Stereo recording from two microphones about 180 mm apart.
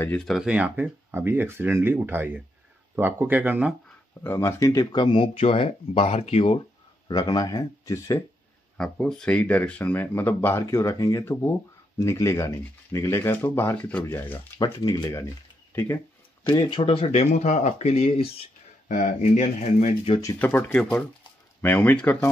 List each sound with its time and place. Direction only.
0.0 s speech: 5° left (ahead or behind)
4.2 s speech: 15° left (ahead or behind)
8.7 s speech: 5° left (ahead or behind)
14.6 s speech: 20° left (ahead or behind)
16.4 s speech: 30° left (ahead or behind)
18.9 s speech: 45° left (ahead or behind)
20.2 s speech: 15° left (ahead or behind)